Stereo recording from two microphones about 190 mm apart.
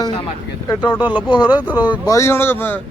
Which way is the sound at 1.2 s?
25° left (ahead or behind).